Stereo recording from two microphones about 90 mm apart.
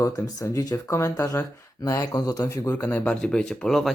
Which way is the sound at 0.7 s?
35° left (ahead or behind).